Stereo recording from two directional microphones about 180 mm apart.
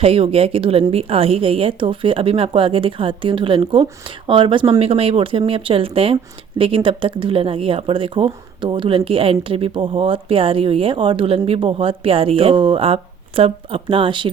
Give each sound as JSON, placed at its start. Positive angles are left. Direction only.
{"t": 0.0, "sound": "speech", "side_deg": -30}